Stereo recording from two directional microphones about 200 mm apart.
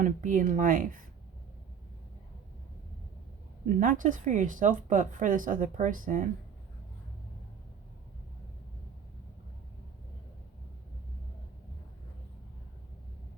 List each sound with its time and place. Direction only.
0.0 s speech: 40° right (ahead or behind)
3.7 s speech: 40° right (ahead or behind)